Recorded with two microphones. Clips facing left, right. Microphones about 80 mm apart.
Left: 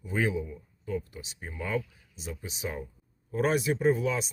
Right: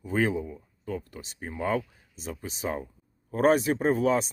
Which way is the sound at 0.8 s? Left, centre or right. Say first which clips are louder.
Left 1 dB; right.